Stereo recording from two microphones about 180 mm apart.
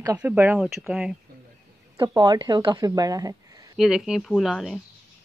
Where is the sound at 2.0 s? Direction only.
25° right (ahead or behind).